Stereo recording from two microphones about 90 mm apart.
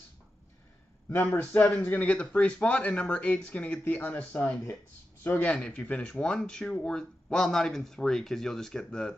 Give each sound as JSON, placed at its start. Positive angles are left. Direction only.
{"t": 1.0, "sound": "speech", "side_deg": 20}